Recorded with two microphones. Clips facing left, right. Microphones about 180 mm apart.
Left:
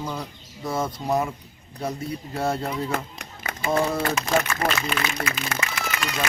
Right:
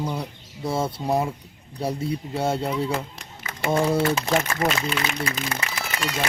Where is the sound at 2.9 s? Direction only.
65° left (ahead or behind).